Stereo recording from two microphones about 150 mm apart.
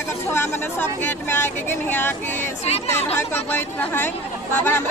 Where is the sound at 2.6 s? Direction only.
45° left (ahead or behind).